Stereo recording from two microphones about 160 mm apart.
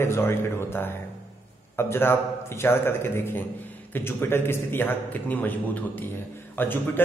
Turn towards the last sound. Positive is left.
turn(degrees=10)  # may be behind; listen again after turning